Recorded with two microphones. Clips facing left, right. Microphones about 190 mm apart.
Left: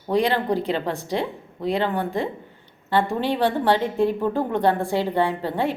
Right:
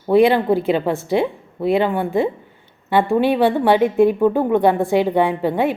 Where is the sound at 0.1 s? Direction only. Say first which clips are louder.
Right 7 dB; 15° right (ahead or behind).